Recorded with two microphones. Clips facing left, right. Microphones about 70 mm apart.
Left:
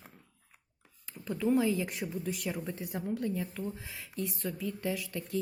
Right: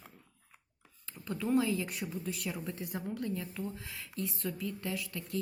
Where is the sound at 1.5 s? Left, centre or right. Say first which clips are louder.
Right 1 dB; left.